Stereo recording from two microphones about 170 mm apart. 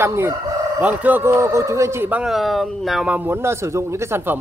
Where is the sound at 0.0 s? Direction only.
15° right (ahead or behind).